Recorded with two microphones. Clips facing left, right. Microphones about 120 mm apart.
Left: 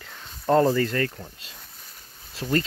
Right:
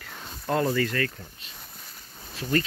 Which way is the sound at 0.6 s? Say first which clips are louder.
Left 4 dB; 35° left (ahead or behind).